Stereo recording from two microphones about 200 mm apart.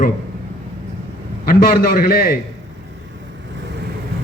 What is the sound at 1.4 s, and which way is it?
Speech, 50° left (ahead or behind).